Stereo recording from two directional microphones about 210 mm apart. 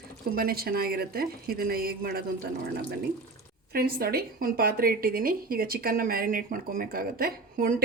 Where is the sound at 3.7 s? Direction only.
45° right (ahead or behind).